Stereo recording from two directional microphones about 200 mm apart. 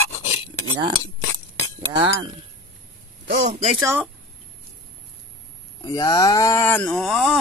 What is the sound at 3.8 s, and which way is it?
Speech, 10° right (ahead or behind).